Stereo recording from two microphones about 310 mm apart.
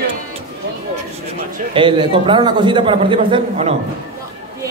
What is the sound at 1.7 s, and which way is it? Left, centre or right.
A man's voice, centre.